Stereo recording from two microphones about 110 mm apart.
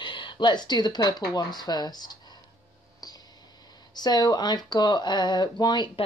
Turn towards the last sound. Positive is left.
turn(degrees=40)  # may be behind; listen again after turning